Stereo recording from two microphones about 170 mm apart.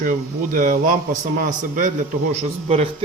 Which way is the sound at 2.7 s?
35° right (ahead or behind).